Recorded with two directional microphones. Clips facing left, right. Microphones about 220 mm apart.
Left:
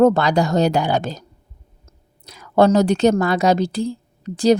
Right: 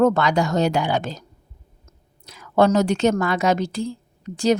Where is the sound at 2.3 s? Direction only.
35° left (ahead or behind).